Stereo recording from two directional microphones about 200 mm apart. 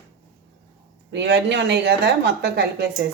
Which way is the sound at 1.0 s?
60° right (ahead or behind).